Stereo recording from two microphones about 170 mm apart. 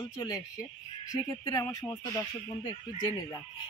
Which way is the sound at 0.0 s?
20° left (ahead or behind).